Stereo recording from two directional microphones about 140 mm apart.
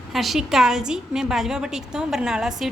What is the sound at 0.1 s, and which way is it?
A woman's voice, centre (ahead or behind).